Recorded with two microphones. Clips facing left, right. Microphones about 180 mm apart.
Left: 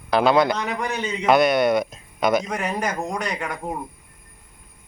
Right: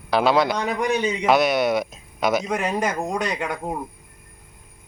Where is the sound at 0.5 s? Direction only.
15° right (ahead or behind).